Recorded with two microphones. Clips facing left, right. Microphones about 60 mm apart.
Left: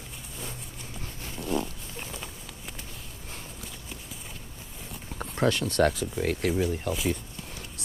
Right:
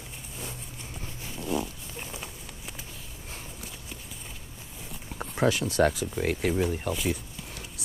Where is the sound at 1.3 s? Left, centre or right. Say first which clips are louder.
Left 1 dB; centre.